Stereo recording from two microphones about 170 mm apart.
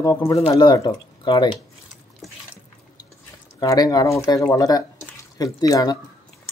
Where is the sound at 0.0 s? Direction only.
20° left (ahead or behind).